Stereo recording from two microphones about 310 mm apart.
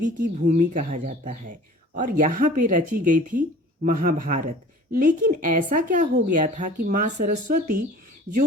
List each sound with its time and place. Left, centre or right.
0.2 s speech: right